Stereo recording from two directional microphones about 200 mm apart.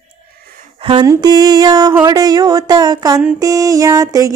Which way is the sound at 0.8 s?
20° right (ahead or behind).